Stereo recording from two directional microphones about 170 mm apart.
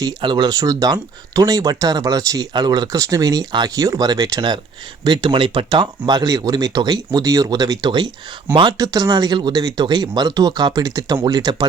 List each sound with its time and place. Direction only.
0.0 s speech: 25° right (ahead or behind)